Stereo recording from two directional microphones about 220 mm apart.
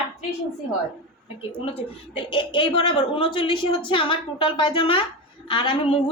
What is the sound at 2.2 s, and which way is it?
A woman's voice, 25° left (ahead or behind).